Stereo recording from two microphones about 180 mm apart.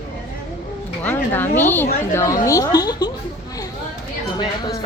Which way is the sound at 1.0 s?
10° left (ahead or behind).